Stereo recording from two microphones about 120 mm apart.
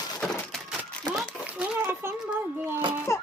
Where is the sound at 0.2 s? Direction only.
Centre (ahead or behind); by 2.1 s 20° right (ahead or behind).